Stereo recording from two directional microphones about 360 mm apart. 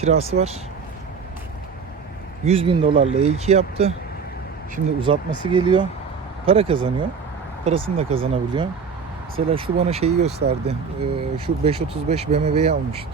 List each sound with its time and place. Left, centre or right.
0.0 s speech: centre
2.4 s speech: centre